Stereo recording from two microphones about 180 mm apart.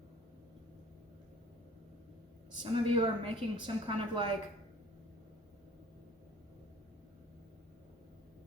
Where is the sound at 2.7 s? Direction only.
30° right (ahead or behind).